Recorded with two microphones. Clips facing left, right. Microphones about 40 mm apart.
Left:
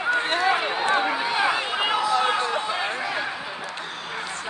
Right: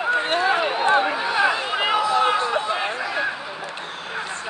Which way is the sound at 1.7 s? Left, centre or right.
Centre.